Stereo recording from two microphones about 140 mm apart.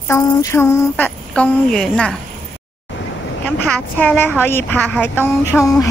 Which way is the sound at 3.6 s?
10° left (ahead or behind).